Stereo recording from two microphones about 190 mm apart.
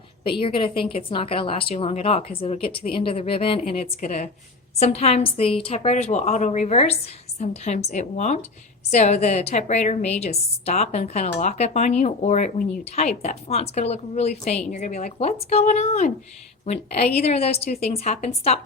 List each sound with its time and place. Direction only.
0.3 s a woman's voice: 30° left (ahead or behind)